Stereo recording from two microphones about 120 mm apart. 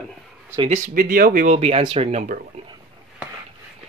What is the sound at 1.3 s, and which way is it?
Speech, 75° right (ahead or behind).